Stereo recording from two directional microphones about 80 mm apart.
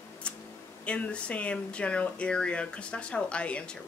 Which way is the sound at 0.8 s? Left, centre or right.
Centre.